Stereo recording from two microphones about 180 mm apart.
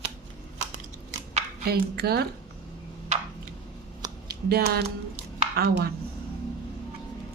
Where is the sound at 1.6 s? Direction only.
60° right (ahead or behind).